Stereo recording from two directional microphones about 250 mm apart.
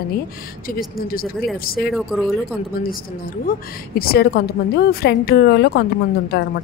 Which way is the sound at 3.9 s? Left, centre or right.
Left.